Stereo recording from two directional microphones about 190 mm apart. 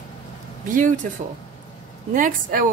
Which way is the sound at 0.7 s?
45° right (ahead or behind).